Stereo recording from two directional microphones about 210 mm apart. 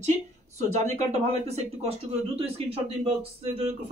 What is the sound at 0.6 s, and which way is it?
Speech, 30° right (ahead or behind).